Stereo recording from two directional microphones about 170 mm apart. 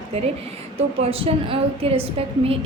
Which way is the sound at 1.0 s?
35° right (ahead or behind).